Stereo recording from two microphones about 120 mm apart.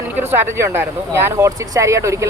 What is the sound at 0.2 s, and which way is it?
Speech, 20° right (ahead or behind).